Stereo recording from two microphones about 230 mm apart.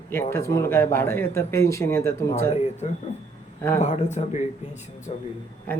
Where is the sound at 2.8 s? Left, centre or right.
Left.